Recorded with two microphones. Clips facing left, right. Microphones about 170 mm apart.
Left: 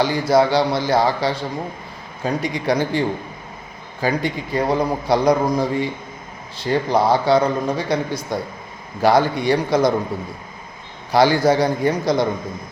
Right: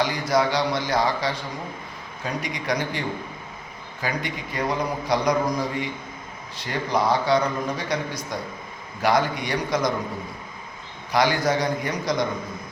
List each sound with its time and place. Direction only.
0.0 s a man's voice: 30° left (ahead or behind)
4.0 s a man's voice: 30° left (ahead or behind)
11.1 s a man's voice: 30° left (ahead or behind)